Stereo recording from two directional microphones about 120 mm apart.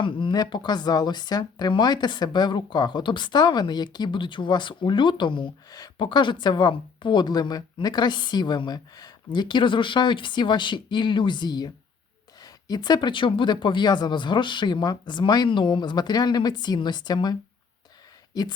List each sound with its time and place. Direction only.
0.0 s speech: 45° left (ahead or behind)
18.3 s speech: 30° left (ahead or behind)